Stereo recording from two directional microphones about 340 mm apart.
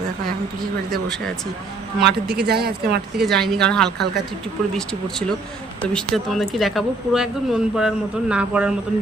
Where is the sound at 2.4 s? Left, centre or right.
Right.